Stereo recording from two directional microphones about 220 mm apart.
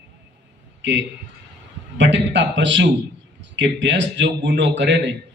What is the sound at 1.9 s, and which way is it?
A man's voice, 55° right (ahead or behind).